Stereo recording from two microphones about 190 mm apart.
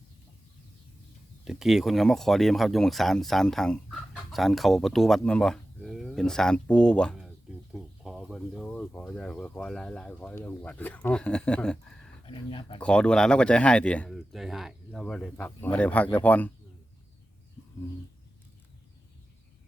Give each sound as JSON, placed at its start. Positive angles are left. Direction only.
{"t": 1.5, "sound": "speech", "side_deg": 0}
{"t": 12.2, "sound": "speech", "side_deg": 25}
{"t": 12.8, "sound": "speech", "side_deg": 5}